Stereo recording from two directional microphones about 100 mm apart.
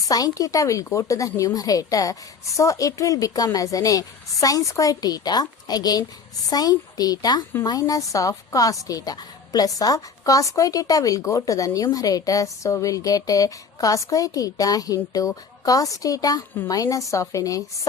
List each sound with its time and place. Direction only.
0.1 s a woman's voice: 40° left (ahead or behind)